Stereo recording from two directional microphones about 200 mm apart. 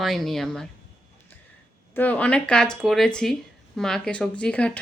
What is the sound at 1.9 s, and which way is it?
A woman's voice, 10° left (ahead or behind).